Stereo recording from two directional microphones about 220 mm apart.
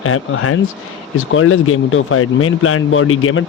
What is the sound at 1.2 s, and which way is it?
Speech, 65° left (ahead or behind).